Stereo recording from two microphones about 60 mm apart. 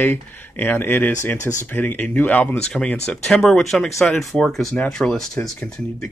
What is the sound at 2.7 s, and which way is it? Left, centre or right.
Speech, centre.